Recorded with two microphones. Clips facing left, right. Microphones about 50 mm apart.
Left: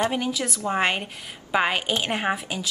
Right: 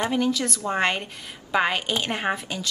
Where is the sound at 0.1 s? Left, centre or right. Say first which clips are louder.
Right 3 dB; centre.